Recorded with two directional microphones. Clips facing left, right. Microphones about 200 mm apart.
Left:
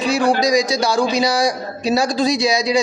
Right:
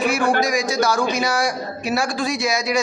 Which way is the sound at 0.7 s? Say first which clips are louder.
Left 2 dB; 30° left (ahead or behind).